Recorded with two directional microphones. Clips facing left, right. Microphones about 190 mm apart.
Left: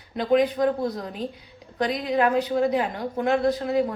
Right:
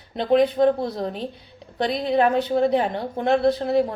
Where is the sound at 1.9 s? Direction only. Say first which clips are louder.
Right 3 dB; 30° right (ahead or behind).